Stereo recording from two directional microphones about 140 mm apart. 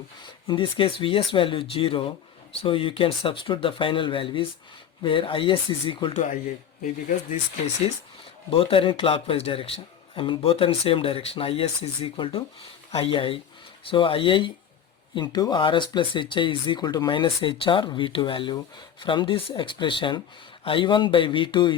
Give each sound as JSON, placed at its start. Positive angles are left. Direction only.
{"t": 0.4, "sound": "speech", "side_deg": 35}
{"t": 6.1, "sound": "speech", "side_deg": 60}
{"t": 8.4, "sound": "speech", "side_deg": 40}